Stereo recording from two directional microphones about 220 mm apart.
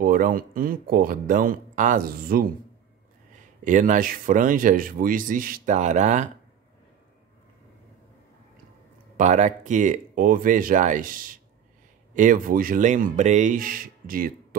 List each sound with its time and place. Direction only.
0.0 s speech: 40° right (ahead or behind)
3.6 s speech: 35° right (ahead or behind)
9.1 s speech: 35° right (ahead or behind)